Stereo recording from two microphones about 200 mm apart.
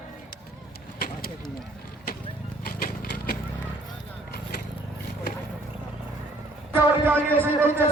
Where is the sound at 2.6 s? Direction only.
45° left (ahead or behind).